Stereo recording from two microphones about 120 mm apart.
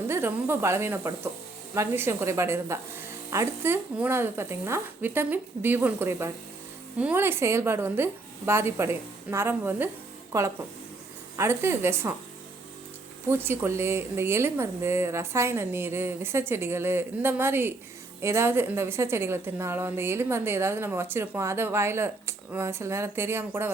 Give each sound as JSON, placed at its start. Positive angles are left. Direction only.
{"t": 0.1, "sound": "a woman's voice", "side_deg": -20}
{"t": 13.2, "sound": "a woman's voice", "side_deg": -20}